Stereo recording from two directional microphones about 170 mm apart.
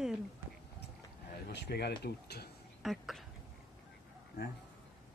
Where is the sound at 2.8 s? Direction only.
Centre (ahead or behind).